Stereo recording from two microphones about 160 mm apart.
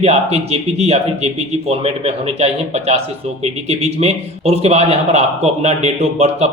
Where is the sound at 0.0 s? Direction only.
40° right (ahead or behind).